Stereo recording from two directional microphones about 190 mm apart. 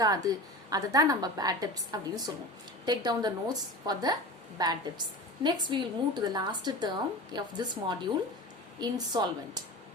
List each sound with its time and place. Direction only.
0.0 s a woman's voice: 20° right (ahead or behind)